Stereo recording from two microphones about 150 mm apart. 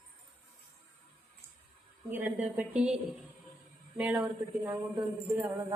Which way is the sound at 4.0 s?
5° right (ahead or behind).